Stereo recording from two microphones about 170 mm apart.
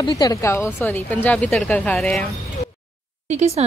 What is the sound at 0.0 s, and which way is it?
A woman's voice, 20° left (ahead or behind).